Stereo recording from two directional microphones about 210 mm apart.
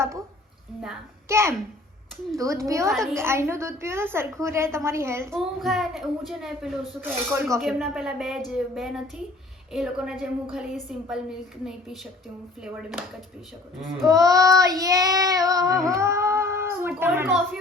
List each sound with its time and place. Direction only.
0.8 s a child's voice: 10° right (ahead or behind)
2.9 s a child's voice: centre (ahead or behind)
3.2 s a woman's voice: 10° right (ahead or behind)
5.3 s a child's voice: centre (ahead or behind)
14.1 s a woman's voice: 15° right (ahead or behind)